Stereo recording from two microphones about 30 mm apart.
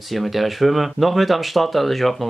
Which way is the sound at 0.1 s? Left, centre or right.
Centre.